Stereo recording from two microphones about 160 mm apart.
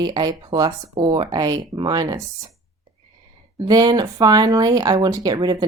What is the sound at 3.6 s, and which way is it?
Speech, 25° right (ahead or behind).